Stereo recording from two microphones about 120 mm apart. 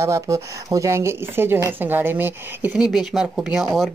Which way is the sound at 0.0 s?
25° right (ahead or behind).